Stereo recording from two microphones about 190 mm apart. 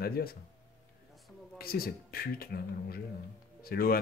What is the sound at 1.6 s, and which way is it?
Speech, 50° left (ahead or behind).